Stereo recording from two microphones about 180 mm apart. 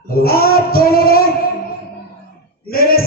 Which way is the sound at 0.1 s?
60° left (ahead or behind).